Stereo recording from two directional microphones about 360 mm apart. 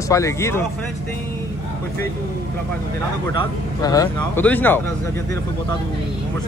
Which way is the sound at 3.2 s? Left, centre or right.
Centre.